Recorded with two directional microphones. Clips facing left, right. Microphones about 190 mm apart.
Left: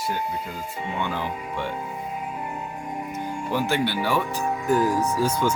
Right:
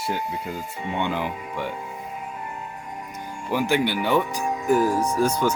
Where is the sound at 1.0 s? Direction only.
15° right (ahead or behind).